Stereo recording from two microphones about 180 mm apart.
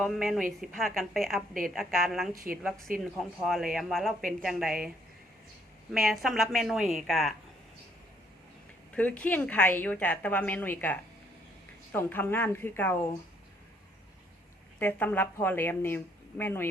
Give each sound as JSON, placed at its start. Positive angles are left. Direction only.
{"t": 0.0, "sound": "speech", "side_deg": 0}
{"t": 5.9, "sound": "speech", "side_deg": 0}
{"t": 9.0, "sound": "a woman's voice", "side_deg": 10}
{"t": 14.8, "sound": "a woman's voice", "side_deg": 10}